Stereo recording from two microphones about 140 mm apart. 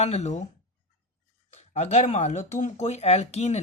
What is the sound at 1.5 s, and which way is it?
Speech, 50° left (ahead or behind).